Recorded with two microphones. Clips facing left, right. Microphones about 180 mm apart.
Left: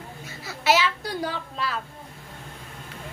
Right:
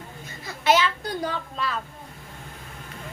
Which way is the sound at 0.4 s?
5° left (ahead or behind).